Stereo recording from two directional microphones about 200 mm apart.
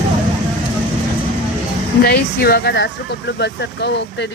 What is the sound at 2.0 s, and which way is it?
Speech, 50° left (ahead or behind).